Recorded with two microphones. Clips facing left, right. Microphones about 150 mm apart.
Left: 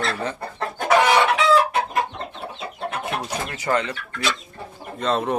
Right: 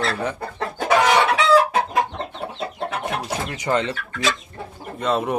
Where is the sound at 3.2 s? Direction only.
20° right (ahead or behind).